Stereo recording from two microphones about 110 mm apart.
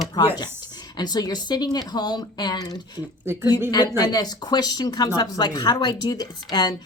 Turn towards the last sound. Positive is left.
turn(degrees=40)  # may be behind; listen again after turning